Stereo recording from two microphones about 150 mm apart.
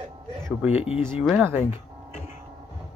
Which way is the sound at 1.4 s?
15° right (ahead or behind).